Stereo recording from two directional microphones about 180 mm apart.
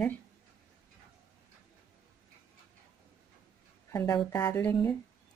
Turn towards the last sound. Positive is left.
turn(degrees=10)  # may be behind; listen again after turning